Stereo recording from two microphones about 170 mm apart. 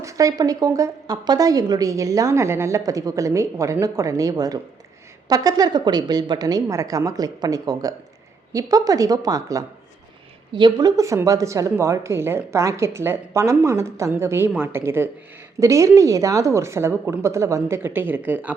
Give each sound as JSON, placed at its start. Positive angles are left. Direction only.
{"t": 0.0, "sound": "a woman's voice", "side_deg": -20}